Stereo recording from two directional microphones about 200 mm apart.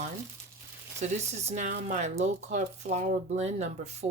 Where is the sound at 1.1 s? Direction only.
35° right (ahead or behind).